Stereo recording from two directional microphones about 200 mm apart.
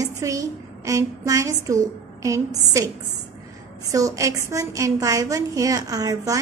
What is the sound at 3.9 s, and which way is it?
A woman's voice, 15° right (ahead or behind).